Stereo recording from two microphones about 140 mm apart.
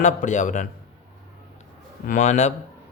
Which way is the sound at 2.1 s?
60° left (ahead or behind).